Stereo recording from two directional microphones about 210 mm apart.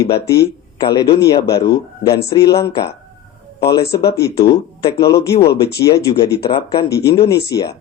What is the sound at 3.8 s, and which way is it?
Speech, 50° left (ahead or behind).